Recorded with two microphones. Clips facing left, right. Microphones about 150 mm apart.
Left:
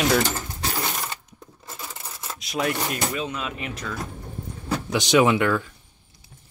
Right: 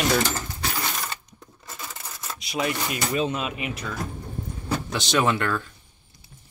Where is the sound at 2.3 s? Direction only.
Centre (ahead or behind).